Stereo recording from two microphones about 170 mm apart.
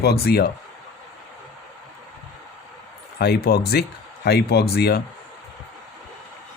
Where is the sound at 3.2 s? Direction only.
70° left (ahead or behind).